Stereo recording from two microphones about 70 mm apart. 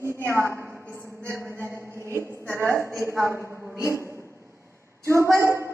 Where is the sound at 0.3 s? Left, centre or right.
Right.